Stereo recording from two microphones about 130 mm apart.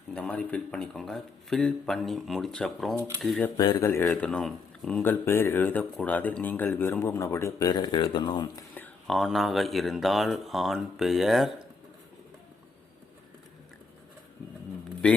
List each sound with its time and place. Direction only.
0.1 s speech: 10° left (ahead or behind)
3.8 s speech: 20° left (ahead or behind)
4.0 s speech: 5° left (ahead or behind); by 8.6 s 35° left (ahead or behind)
9.0 s speech: centre (ahead or behind)